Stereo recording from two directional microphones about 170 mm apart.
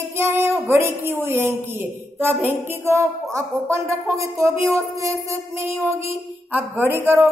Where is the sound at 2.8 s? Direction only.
15° right (ahead or behind).